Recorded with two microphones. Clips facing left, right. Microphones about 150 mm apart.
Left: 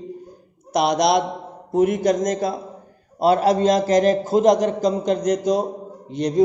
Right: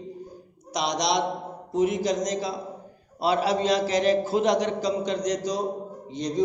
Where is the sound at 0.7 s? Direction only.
55° left (ahead or behind).